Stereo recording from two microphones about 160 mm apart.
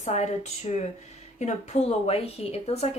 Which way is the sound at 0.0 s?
45° left (ahead or behind).